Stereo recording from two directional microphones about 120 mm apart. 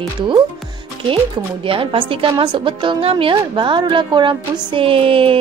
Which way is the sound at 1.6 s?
45° right (ahead or behind).